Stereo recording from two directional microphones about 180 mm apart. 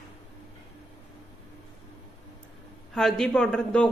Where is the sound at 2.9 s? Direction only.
Centre (ahead or behind).